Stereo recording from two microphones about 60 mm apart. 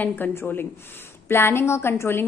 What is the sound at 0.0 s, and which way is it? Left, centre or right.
Speech, left.